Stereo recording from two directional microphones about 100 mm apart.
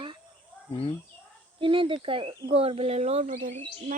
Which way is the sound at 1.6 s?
60° right (ahead or behind).